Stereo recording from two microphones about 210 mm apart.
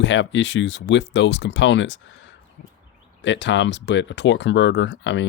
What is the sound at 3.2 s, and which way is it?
Speech, 60° left (ahead or behind).